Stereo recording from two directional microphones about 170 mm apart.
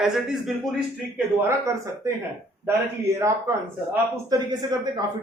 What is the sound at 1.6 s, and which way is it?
Speech, 20° right (ahead or behind).